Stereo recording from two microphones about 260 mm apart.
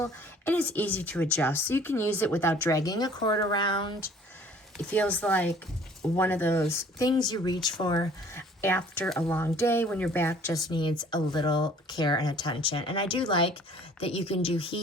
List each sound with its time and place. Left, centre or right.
0.0 s speech: centre
4.8 s speech: centre